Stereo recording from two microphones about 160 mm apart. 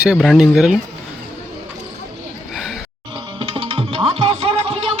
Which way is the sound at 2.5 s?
Centre (ahead or behind).